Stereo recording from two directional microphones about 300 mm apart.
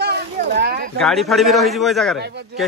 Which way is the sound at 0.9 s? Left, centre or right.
Centre.